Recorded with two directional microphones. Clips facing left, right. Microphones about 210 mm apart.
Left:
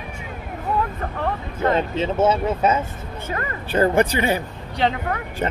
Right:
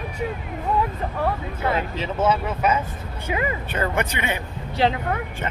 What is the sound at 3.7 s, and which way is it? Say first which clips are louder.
Speech: left 7 dB; 35° left (ahead or behind).